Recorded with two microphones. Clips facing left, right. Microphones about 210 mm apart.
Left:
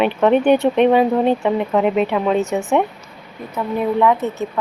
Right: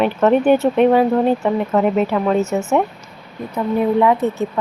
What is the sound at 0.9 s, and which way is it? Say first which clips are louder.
Speech: even; 10° left (ahead or behind).